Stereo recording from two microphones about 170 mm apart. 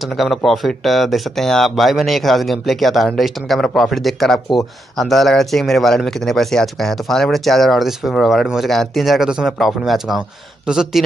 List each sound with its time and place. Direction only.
0.2 s speech: centre (ahead or behind)